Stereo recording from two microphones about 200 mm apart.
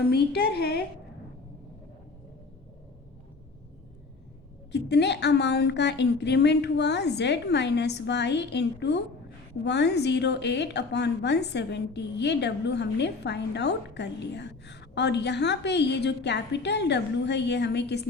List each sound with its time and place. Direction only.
0.1 s a woman's voice: 50° left (ahead or behind)
4.7 s a woman's voice: 60° left (ahead or behind)